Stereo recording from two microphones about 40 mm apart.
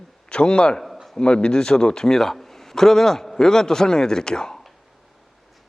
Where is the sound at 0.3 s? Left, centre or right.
Left.